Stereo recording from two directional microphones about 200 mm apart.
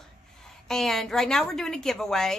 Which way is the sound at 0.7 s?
Centre (ahead or behind).